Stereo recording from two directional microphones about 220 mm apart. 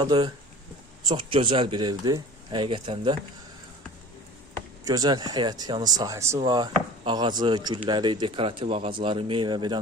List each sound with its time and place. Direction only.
0.0 s speech: 20° right (ahead or behind)
4.9 s speech: 15° right (ahead or behind)